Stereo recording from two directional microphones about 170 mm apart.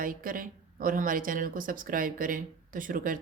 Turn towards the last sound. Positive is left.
turn(degrees=-55)  # may be behind; listen again after turning